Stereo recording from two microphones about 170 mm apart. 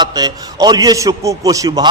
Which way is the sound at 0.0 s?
25° right (ahead or behind).